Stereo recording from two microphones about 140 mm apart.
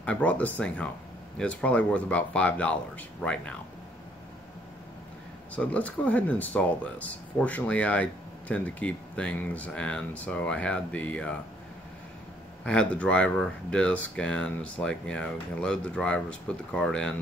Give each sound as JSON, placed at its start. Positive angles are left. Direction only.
{"t": 0.0, "sound": "speech", "side_deg": 10}
{"t": 5.6, "sound": "speech", "side_deg": 10}
{"t": 12.6, "sound": "speech", "side_deg": 5}